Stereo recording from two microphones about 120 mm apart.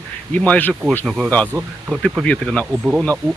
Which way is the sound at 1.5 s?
25° right (ahead or behind).